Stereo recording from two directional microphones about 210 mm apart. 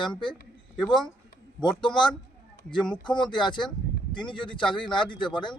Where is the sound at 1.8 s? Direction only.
20° left (ahead or behind).